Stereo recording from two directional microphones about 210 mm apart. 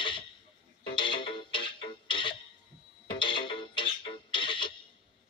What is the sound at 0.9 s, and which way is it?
Music, 25° left (ahead or behind).